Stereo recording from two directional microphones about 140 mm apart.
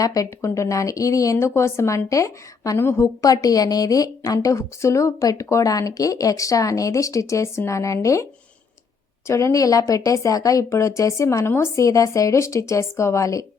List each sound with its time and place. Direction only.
0.0 s speech: 25° left (ahead or behind)